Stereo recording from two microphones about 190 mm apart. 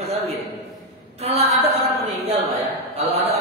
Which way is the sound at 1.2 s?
30° right (ahead or behind).